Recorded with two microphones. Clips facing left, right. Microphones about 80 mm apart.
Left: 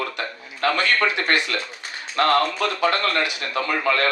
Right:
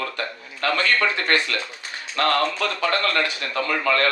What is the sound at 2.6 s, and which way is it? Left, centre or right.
Speech, centre.